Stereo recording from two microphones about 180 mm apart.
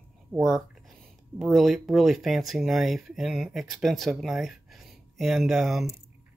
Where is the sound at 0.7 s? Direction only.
Centre (ahead or behind).